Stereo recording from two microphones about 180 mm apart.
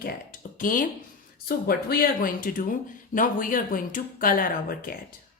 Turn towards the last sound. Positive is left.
turn(degrees=50)  # may be behind; listen again after turning